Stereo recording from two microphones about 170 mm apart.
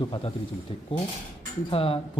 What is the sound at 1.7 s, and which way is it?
Speech, 35° left (ahead or behind).